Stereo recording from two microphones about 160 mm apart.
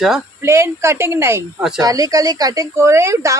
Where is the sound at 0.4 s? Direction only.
15° right (ahead or behind).